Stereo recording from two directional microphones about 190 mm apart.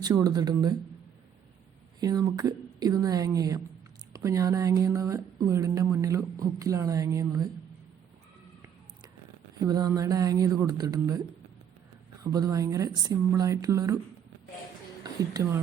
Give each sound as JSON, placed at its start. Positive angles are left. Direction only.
{"t": 0.0, "sound": "speech", "side_deg": -20}
{"t": 2.0, "sound": "speech", "side_deg": -20}
{"t": 9.6, "sound": "speech", "side_deg": -20}
{"t": 12.2, "sound": "speech", "side_deg": -20}
{"t": 15.0, "sound": "speech", "side_deg": -20}